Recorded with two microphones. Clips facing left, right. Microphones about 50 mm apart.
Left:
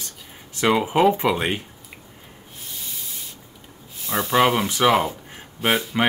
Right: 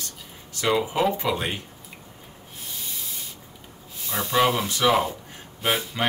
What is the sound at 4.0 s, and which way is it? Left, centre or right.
Speech, centre.